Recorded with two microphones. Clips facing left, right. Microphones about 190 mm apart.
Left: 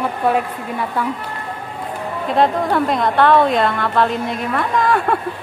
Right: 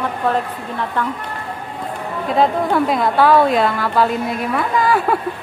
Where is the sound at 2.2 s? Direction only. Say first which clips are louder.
Even; centre (ahead or behind).